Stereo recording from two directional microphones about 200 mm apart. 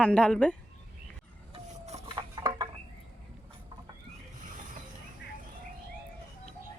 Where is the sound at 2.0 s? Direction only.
20° right (ahead or behind).